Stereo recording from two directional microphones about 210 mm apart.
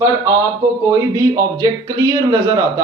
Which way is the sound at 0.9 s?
15° right (ahead or behind).